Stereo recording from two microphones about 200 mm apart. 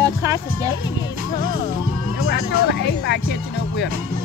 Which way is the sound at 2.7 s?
60° left (ahead or behind).